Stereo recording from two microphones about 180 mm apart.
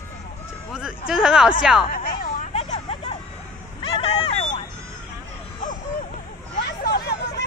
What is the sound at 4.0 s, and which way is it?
Vehicle, 35° left (ahead or behind).